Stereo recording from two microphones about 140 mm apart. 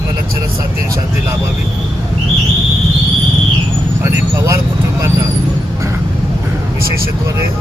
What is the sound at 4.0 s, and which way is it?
Speech, 20° right (ahead or behind).